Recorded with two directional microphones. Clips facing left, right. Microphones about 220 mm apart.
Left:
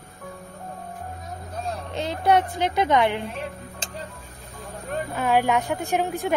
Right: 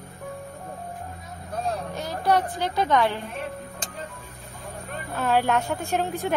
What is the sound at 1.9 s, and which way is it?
A woman's voice, 25° left (ahead or behind).